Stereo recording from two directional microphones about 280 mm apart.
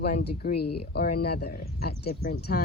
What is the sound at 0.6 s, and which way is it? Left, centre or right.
Speech, left.